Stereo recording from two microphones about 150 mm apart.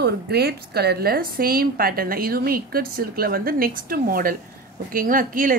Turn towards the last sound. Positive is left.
turn(degrees=-65)  # may be behind; listen again after turning